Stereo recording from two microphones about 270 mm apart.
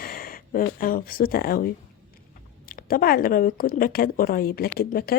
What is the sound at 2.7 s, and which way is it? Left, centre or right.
Speech, left.